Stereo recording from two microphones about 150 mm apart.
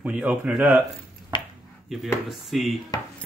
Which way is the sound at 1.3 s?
30° left (ahead or behind).